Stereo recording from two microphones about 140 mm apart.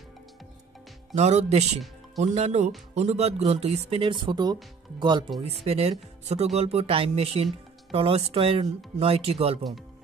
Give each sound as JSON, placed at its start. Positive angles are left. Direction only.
{"t": 1.1, "sound": "speech", "side_deg": -50}
{"t": 5.4, "sound": "speech", "side_deg": -50}